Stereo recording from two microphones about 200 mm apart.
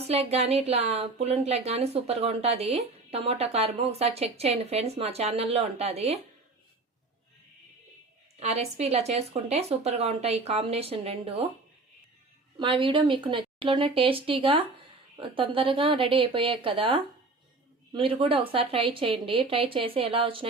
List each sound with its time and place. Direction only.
0.1 s speech: 30° right (ahead or behind)
8.4 s speech: 30° right (ahead or behind)
12.5 s speech: 25° right (ahead or behind)